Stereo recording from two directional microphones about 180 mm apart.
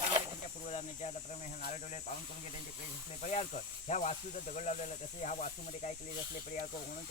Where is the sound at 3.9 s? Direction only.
40° left (ahead or behind).